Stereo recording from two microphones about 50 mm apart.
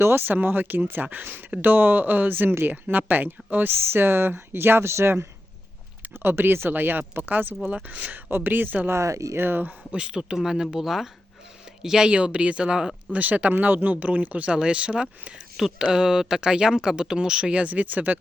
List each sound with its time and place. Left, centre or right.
0.0 s speech: right
0.3 s speech: right
6.1 s speech: right
7.7 s speech: right
8.1 s speech: right
8.9 s speech: right
9.4 s speech: right
9.9 s speech: centre
13.1 s speech: right
14.5 s speech: centre; by 18.2 s right